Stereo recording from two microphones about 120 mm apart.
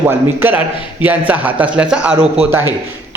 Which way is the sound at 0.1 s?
15° right (ahead or behind).